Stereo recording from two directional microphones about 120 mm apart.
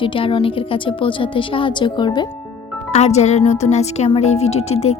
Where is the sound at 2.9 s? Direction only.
65° left (ahead or behind).